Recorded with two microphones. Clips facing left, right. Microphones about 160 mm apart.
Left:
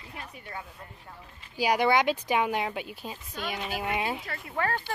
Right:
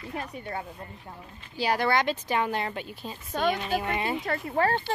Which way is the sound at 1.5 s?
15° left (ahead or behind).